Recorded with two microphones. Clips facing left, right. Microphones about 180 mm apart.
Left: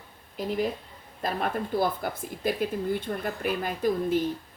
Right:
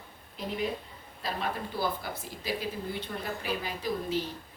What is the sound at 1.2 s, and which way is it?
Speech, 50° left (ahead or behind).